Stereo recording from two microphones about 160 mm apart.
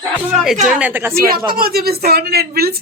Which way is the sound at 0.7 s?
10° right (ahead or behind).